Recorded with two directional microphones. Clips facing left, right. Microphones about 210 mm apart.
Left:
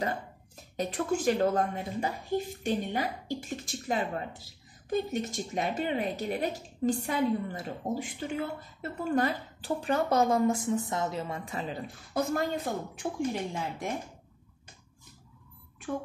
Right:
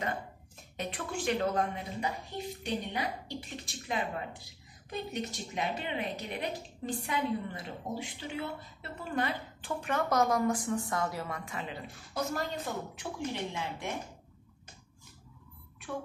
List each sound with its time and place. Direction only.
0.7 s a woman's voice: 40° left (ahead or behind)